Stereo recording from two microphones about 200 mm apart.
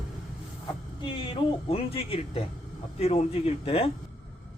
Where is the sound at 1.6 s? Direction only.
30° left (ahead or behind).